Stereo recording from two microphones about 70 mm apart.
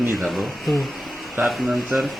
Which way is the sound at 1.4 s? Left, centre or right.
Right.